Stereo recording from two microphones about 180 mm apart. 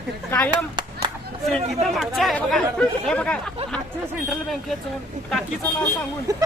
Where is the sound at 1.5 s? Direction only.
Centre (ahead or behind).